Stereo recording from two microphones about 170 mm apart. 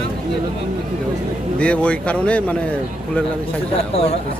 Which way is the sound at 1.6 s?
5° left (ahead or behind).